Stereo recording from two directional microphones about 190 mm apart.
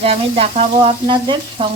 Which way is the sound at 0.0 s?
30° right (ahead or behind).